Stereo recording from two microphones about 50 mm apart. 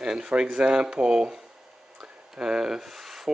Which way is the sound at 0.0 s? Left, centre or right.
Centre.